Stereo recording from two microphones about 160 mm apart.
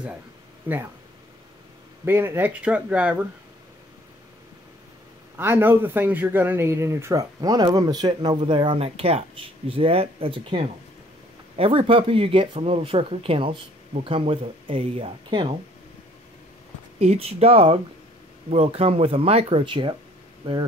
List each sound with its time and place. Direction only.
0.7 s speech: 10° right (ahead or behind)
2.0 s speech: 15° right (ahead or behind)
5.4 s speech: 10° right (ahead or behind); by 15.4 s 35° right (ahead or behind)
17.0 s speech: 40° right (ahead or behind)